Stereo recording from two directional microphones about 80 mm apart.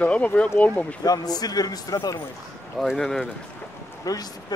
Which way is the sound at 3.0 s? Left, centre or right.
Centre.